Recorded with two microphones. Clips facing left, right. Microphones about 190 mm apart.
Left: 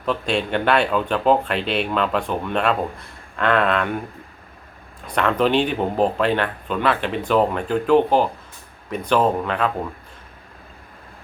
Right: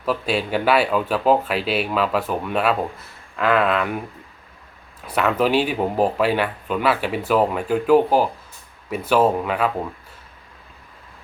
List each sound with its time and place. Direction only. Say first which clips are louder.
0.0 s speech: even; 5° right (ahead or behind)
5.0 s speech: even; 5° right (ahead or behind)